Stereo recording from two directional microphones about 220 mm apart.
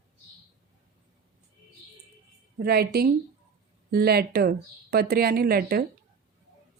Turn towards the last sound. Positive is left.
turn(degrees=-45)  # may be behind; listen again after turning